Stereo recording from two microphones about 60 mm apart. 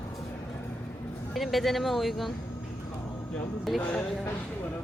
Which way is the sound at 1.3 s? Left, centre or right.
Centre.